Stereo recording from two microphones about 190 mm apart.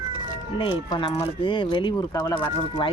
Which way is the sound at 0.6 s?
25° left (ahead or behind).